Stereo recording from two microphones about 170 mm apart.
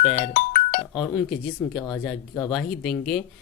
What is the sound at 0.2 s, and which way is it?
Music, 45° left (ahead or behind).